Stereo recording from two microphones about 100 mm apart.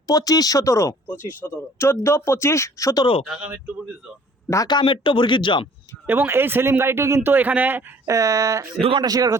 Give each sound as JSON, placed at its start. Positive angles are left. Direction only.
{"t": 0.1, "sound": "speech", "side_deg": 40}
{"t": 4.4, "sound": "speech", "side_deg": 35}
{"t": 4.7, "sound": "speech", "side_deg": 55}
{"t": 6.1, "sound": "speech", "side_deg": -25}
{"t": 8.0, "sound": "speech", "side_deg": -35}
{"t": 8.8, "sound": "a man's voice", "side_deg": -65}
{"t": 9.0, "sound": "speech", "side_deg": -40}